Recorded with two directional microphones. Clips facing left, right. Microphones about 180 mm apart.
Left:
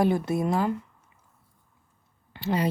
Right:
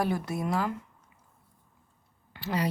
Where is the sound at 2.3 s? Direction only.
25° left (ahead or behind).